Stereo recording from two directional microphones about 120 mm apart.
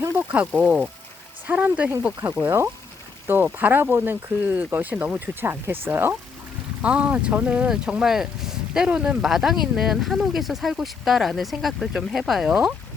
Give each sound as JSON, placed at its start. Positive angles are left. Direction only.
{"t": 0.2, "sound": "speech", "side_deg": -15}